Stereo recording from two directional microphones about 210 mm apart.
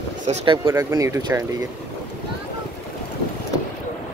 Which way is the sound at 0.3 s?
20° right (ahead or behind).